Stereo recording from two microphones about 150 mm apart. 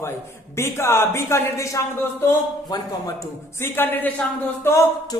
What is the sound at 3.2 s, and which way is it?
A man's voice, 15° left (ahead or behind).